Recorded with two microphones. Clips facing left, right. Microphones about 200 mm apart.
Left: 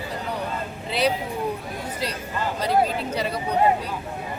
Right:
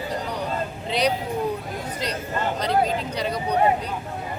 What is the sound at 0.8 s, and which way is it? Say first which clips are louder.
Speech: even; 5° left (ahead or behind).